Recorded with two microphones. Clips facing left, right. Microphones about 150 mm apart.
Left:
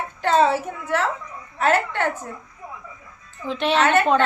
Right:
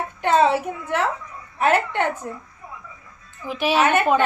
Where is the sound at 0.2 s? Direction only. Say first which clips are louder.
Even; 15° right (ahead or behind).